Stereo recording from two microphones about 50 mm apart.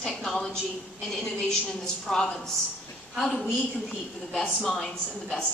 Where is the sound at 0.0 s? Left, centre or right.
Centre.